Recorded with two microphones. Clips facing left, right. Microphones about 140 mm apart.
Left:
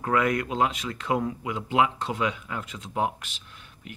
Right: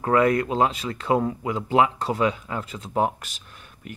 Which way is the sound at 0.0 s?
30° right (ahead or behind).